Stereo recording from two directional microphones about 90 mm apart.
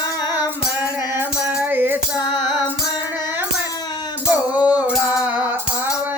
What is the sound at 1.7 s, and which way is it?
Music, 20° right (ahead or behind).